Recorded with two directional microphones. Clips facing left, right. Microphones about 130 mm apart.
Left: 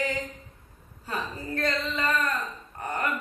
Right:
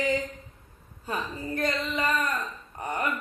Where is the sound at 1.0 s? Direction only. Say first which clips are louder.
Right 1 dB; 15° right (ahead or behind).